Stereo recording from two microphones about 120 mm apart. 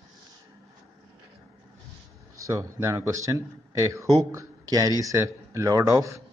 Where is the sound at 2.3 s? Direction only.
30° right (ahead or behind).